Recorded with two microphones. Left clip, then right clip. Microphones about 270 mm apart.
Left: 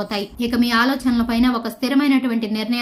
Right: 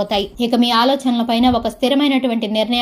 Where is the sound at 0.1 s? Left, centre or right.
Centre.